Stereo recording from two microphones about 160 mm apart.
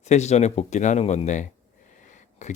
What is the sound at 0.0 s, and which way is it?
Speech, 45° left (ahead or behind).